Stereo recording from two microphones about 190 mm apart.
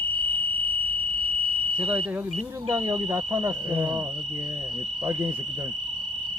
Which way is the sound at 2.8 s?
20° right (ahead or behind).